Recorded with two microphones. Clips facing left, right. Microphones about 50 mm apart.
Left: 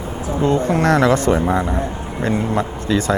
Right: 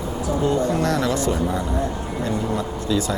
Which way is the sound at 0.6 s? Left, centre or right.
Left.